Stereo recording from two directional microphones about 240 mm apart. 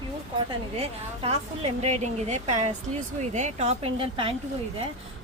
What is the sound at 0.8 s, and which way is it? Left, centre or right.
A woman's voice, right.